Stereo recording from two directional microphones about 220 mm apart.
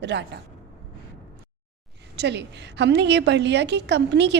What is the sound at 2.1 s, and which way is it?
A woman's voice, 50° right (ahead or behind).